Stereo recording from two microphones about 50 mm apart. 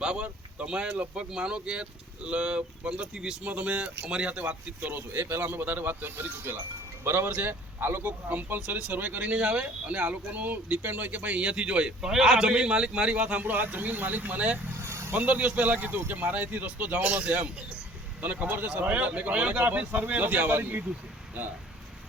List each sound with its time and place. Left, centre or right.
0.0 s speech: centre
4.9 s speech: right
8.3 s speech: right
14.8 s vehicle: right
15.1 s speech: right
15.4 s speech: right